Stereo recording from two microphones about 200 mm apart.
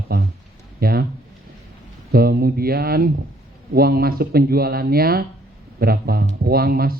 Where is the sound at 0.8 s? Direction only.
50° right (ahead or behind).